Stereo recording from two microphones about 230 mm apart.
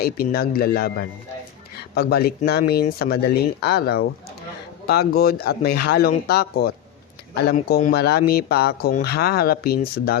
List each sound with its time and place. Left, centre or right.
0.0 s a man's voice: left